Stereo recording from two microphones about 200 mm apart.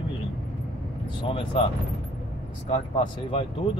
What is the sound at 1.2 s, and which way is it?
Speech, 25° left (ahead or behind).